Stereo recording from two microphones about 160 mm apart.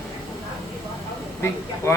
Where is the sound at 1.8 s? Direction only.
15° left (ahead or behind).